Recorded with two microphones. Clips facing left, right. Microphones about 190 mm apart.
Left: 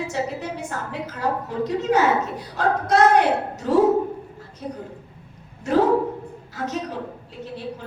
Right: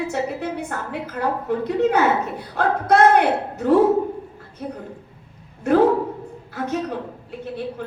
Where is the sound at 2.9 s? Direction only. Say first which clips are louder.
Right 2 dB; 55° right (ahead or behind).